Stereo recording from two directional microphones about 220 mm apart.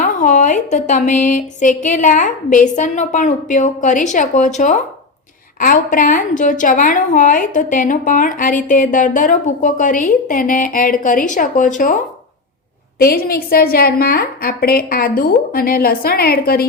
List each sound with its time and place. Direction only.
0.0 s a woman's voice: 35° left (ahead or behind)
13.0 s a woman's voice: 45° left (ahead or behind)